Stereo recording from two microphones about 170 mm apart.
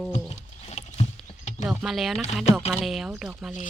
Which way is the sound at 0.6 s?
40° left (ahead or behind).